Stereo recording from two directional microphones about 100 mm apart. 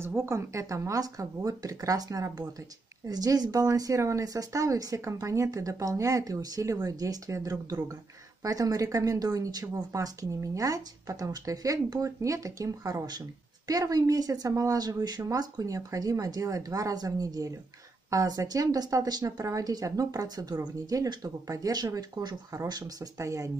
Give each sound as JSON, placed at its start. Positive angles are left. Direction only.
{"t": 0.0, "sound": "a woman's voice", "side_deg": -25}